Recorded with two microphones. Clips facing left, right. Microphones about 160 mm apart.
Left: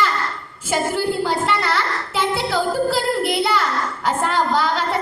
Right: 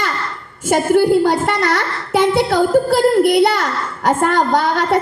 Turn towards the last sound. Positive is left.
turn(degrees=-50)  # may be behind; listen again after turning